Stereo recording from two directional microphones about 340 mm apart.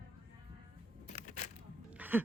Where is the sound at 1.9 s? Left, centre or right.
Centre.